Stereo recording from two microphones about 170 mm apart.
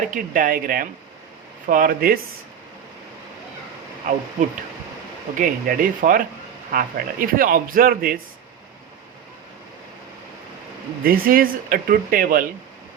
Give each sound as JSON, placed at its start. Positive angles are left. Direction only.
{"t": 0.1, "sound": "speech", "side_deg": -55}
{"t": 4.1, "sound": "speech", "side_deg": -45}
{"t": 5.4, "sound": "speech", "side_deg": -55}
{"t": 11.0, "sound": "speech", "side_deg": -60}